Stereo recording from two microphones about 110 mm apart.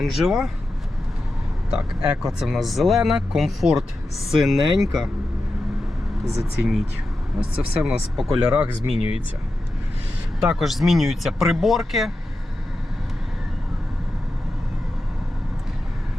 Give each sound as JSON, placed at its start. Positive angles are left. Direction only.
{"t": 0.0, "sound": "speech", "side_deg": -5}
{"t": 1.8, "sound": "speech", "side_deg": -5}
{"t": 6.6, "sound": "speech", "side_deg": -5}
{"t": 8.9, "sound": "speech", "side_deg": 65}
{"t": 10.4, "sound": "speech", "side_deg": 0}